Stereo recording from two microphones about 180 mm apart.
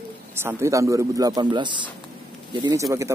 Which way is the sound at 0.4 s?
15° right (ahead or behind).